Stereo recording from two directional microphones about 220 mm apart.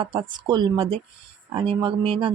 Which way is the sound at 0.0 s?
20° right (ahead or behind).